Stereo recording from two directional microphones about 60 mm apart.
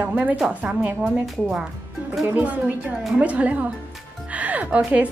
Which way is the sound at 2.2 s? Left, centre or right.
Right.